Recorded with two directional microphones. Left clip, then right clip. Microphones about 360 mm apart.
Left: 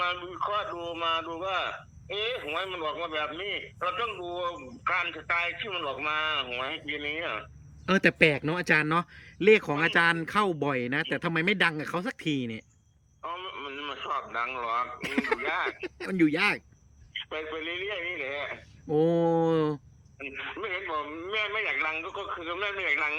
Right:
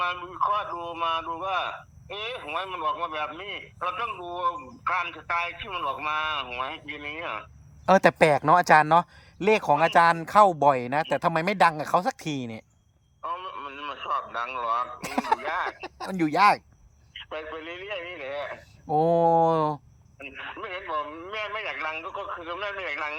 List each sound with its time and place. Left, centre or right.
0.0 s speech: centre
8.0 s speech: right
8.5 s a man's voice: centre